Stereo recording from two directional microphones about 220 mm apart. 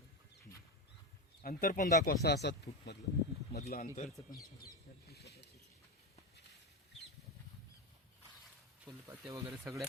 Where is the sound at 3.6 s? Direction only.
40° left (ahead or behind).